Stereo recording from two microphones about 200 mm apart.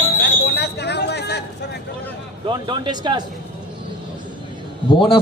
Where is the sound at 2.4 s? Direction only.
25° right (ahead or behind).